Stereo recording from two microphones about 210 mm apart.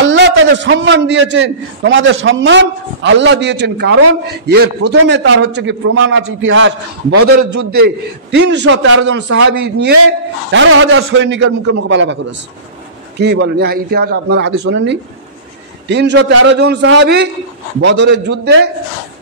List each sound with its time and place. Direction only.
0.0 s a man's voice: 60° right (ahead or behind); by 7.2 s 80° right
7.5 s a man's voice: 55° right (ahead or behind)
10.5 s a man's voice: 65° right (ahead or behind)